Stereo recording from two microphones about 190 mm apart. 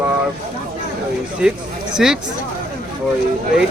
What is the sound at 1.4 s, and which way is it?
Speech, 5° right (ahead or behind).